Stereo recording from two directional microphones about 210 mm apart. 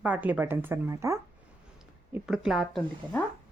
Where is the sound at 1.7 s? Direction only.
5° right (ahead or behind).